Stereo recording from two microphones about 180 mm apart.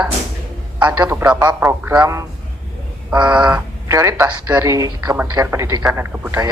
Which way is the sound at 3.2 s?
5° right (ahead or behind).